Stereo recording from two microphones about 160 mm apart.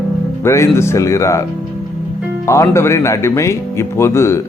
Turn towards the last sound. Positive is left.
turn(degrees=15)  # may be behind; listen again after turning